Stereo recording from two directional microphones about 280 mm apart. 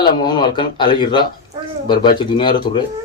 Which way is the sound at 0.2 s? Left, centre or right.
Centre.